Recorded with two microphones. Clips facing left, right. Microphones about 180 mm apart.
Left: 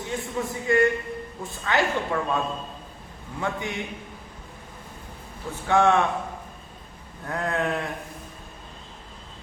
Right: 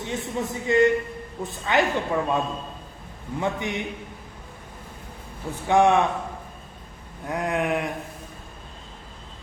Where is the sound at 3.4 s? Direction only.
20° right (ahead or behind).